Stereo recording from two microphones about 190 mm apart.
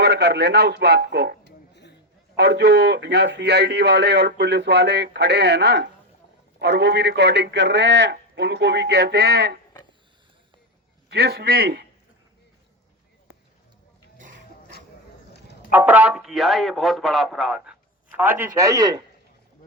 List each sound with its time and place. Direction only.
0.0 s a man's voice: 60° right (ahead or behind)
11.1 s a man's voice: 60° right (ahead or behind)
15.7 s speech: 10° right (ahead or behind)